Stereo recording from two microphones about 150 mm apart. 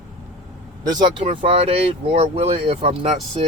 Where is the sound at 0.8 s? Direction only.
30° right (ahead or behind).